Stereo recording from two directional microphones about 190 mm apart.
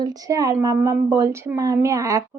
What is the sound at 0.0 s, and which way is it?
A woman's voice, 20° right (ahead or behind).